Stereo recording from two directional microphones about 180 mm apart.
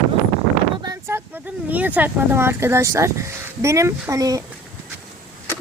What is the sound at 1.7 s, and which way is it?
Speech, 10° right (ahead or behind).